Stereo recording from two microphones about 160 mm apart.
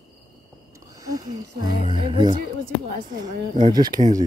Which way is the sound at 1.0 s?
25° right (ahead or behind).